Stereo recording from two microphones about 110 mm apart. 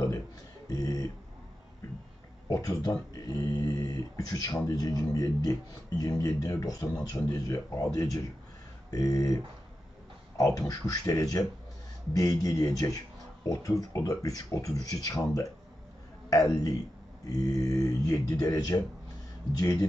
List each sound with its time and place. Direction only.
0.7 s a man's voice: 35° left (ahead or behind)
2.4 s a man's voice: 35° left (ahead or behind)